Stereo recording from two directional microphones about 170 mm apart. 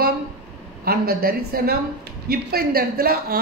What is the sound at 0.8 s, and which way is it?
A woman's voice, 60° right (ahead or behind).